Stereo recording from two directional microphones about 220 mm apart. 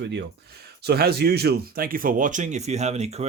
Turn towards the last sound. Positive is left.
turn(degrees=-30)  # may be behind; listen again after turning